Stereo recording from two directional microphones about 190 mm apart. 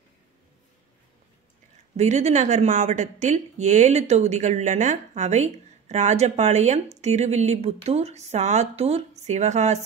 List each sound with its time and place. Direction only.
2.0 s speech: 35° right (ahead or behind)